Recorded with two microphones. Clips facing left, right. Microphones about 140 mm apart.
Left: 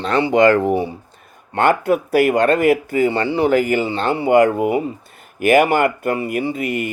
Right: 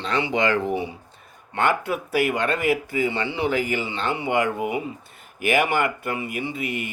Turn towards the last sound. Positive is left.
turn(degrees=45)  # may be behind; listen again after turning